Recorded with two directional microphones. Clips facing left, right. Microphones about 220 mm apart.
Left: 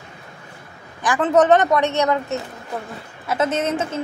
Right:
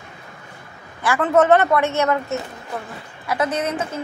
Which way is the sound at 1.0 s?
15° left (ahead or behind).